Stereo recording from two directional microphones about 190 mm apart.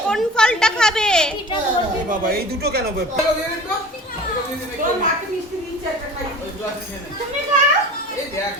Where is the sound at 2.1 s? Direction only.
55° right (ahead or behind).